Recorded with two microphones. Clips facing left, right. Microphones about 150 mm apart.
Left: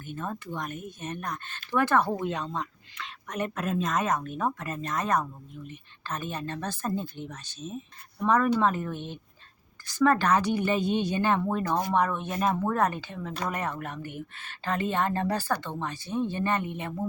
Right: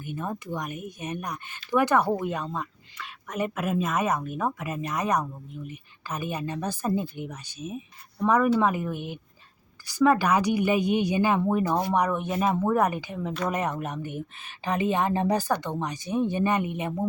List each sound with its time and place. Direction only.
0.0 s speech: 10° right (ahead or behind)